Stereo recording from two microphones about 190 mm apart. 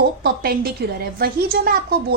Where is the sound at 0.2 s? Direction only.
55° right (ahead or behind).